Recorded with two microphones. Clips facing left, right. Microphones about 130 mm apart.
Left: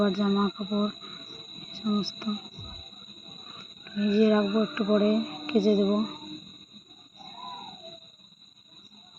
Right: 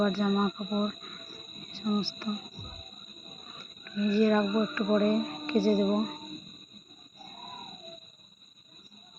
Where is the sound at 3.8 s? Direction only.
15° left (ahead or behind).